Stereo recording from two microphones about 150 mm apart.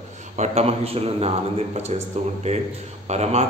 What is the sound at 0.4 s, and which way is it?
Speech, 45° right (ahead or behind).